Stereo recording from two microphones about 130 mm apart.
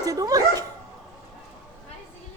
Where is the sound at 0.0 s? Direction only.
25° right (ahead or behind).